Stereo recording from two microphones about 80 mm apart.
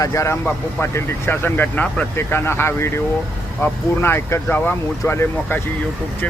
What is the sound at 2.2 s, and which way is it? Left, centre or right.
Speech, left.